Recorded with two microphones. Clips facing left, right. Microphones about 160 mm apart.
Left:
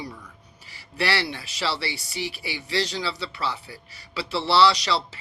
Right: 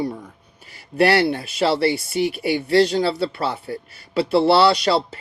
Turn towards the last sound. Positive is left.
turn(degrees=-50)  # may be behind; listen again after turning